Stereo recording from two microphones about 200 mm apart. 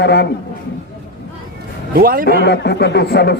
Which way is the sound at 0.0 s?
55° left (ahead or behind).